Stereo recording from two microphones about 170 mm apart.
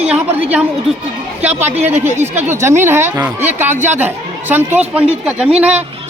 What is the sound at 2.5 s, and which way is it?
A woman's voice, 15° right (ahead or behind).